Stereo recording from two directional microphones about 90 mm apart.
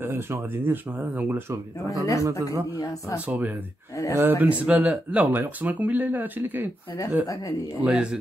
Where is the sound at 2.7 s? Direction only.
40° left (ahead or behind).